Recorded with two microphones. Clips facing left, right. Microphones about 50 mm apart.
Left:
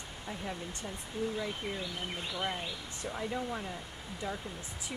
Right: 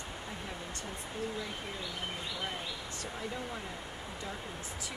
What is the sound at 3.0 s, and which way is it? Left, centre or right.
Speech, centre.